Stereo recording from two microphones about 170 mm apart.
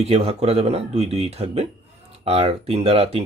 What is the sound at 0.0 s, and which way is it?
Speech, 35° right (ahead or behind).